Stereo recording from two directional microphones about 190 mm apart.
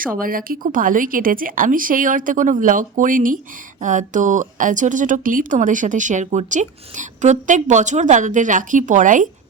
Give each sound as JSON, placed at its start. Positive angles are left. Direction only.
{"t": 0.0, "sound": "speech", "side_deg": -50}